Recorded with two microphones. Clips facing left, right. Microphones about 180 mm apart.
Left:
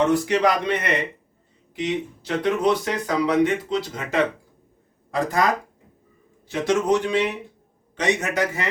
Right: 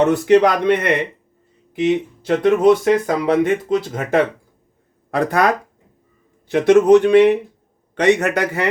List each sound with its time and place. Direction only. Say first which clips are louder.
0.1 s speech: right 6 dB; 60° right (ahead or behind)
5.1 s speech: right 5 dB; 65° right (ahead or behind)
6.5 s speech: right 10 dB; 60° right (ahead or behind)